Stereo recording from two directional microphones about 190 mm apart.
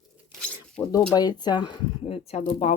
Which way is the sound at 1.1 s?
20° left (ahead or behind).